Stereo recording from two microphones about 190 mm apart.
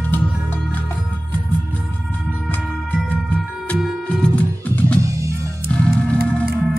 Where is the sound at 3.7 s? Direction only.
5° left (ahead or behind).